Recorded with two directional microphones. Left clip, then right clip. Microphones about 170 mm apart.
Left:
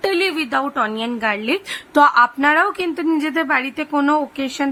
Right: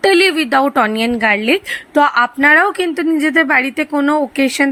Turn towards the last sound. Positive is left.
turn(degrees=-30)  # may be behind; listen again after turning